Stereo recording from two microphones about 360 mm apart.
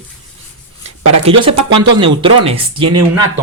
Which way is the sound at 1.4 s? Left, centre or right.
Centre.